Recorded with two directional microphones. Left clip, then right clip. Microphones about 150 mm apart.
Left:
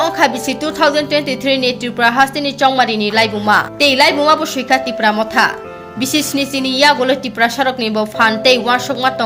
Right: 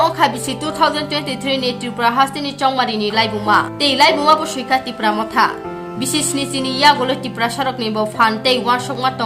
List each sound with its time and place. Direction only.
0.0 s a woman's voice: 15° left (ahead or behind)